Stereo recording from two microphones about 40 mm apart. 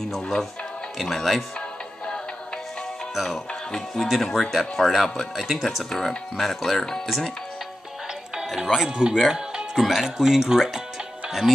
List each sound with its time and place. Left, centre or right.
0.1 s speech: centre
3.2 s speech: centre
8.6 s speech: centre
8.9 s speech: centre
9.8 s speech: centre